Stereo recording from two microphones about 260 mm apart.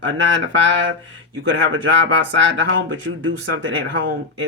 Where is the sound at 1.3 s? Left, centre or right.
Right.